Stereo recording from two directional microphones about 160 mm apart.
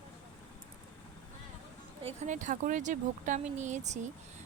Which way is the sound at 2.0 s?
50° right (ahead or behind).